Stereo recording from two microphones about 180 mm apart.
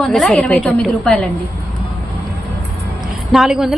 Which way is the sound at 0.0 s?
5° left (ahead or behind).